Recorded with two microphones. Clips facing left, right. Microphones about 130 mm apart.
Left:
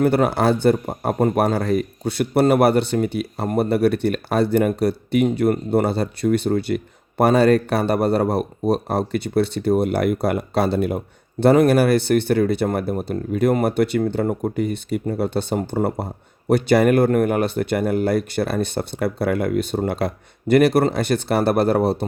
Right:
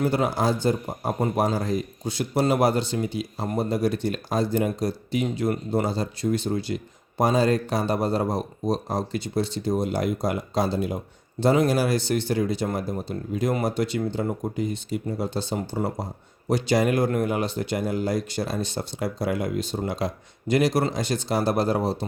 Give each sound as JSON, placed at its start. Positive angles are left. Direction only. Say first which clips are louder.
{"t": 0.0, "sound": "a man's voice", "louder": "left 6 dB", "side_deg": 60}